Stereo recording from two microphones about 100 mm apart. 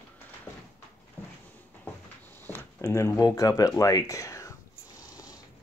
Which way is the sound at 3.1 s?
35° left (ahead or behind).